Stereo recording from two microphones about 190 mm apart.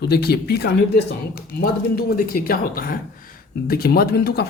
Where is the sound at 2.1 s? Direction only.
50° left (ahead or behind).